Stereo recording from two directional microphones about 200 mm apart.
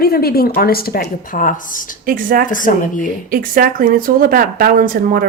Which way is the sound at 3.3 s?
45° right (ahead or behind).